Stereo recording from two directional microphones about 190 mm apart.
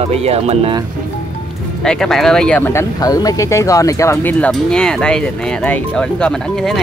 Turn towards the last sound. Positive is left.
turn(degrees=5)  # may be behind; listen again after turning